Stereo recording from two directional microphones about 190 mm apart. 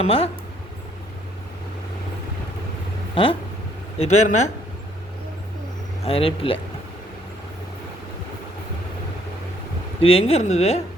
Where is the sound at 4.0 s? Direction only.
40° left (ahead or behind).